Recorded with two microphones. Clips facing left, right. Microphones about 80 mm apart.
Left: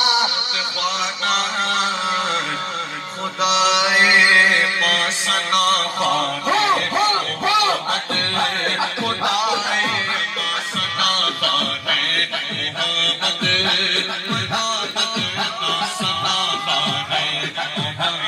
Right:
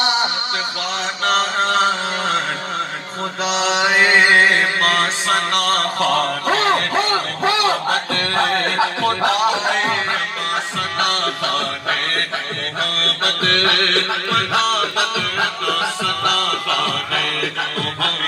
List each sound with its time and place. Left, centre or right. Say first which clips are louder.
1.2 s mantra: right 5 dB; right
8.4 s music: right 5 dB; right
11.0 s music: right 2 dB; right